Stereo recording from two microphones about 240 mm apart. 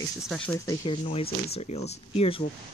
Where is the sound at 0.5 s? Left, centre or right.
Centre.